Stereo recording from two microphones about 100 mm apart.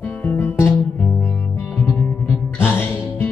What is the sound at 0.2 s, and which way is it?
Music, 20° left (ahead or behind).